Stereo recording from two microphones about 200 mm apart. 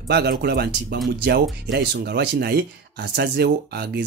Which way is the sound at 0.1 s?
55° right (ahead or behind).